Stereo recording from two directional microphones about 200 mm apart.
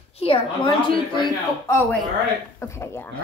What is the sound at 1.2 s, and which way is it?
A man's voice, 20° left (ahead or behind).